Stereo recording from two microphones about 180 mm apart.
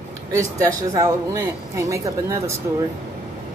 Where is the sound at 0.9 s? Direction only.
20° right (ahead or behind).